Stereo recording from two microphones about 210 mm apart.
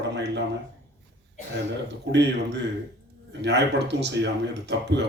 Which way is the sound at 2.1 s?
55° right (ahead or behind).